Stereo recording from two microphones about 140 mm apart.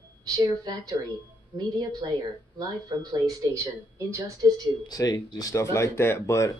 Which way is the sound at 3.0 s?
30° right (ahead or behind).